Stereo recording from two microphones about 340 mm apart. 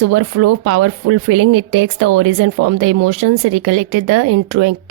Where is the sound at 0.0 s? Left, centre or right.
Right.